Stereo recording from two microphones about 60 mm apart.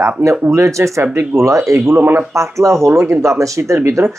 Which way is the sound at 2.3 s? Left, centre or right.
Right.